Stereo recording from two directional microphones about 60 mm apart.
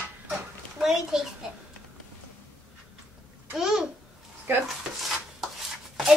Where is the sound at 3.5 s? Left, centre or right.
Centre.